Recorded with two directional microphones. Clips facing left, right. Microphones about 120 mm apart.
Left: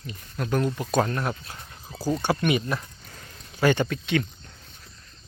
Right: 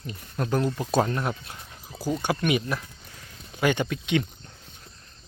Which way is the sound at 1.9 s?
5° right (ahead or behind).